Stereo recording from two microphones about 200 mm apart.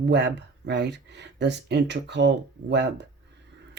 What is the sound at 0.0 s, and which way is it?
Speech, 60° right (ahead or behind).